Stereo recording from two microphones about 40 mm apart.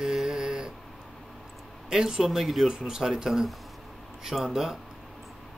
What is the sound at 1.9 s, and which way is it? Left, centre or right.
Speech, centre.